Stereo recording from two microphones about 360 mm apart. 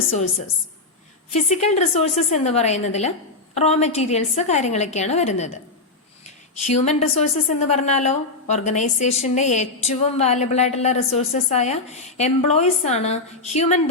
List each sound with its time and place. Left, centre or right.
1.3 s a woman's voice: centre
6.7 s a woman's voice: centre